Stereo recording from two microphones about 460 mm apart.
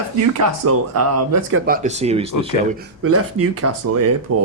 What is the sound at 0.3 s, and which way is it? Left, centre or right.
Speech, right.